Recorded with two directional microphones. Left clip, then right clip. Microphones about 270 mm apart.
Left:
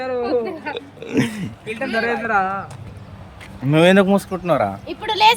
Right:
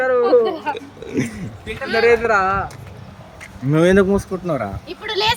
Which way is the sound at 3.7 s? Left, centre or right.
Centre.